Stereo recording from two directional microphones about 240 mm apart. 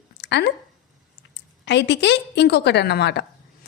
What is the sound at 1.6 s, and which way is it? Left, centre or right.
A woman's voice, left.